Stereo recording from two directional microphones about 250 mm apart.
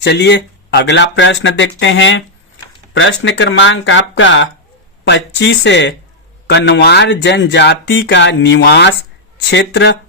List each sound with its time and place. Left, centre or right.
0.0 s speech: left